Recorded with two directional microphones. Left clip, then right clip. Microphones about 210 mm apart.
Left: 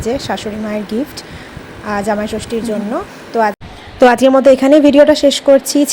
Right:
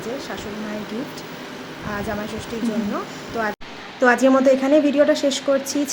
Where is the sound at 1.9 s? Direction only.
30° left (ahead or behind).